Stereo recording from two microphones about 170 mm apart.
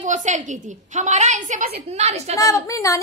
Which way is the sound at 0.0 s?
45° right (ahead or behind).